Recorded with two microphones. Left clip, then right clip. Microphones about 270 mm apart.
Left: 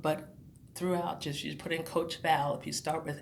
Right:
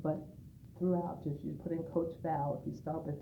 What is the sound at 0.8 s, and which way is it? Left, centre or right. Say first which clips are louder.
Speech: left 3 dB; left.